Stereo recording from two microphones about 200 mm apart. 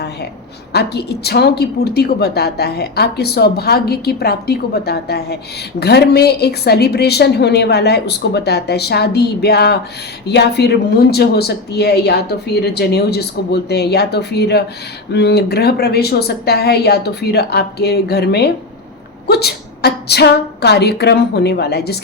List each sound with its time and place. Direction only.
0.7 s a woman's voice: 55° left (ahead or behind)